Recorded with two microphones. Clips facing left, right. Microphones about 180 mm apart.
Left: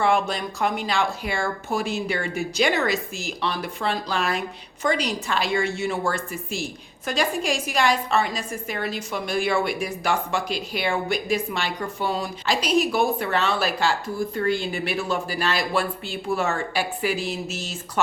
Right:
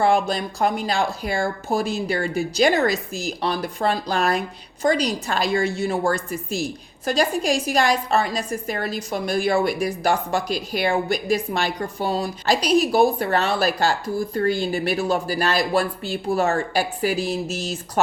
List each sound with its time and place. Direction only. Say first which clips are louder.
0.0 s speech: right 3 dB; 35° right (ahead or behind)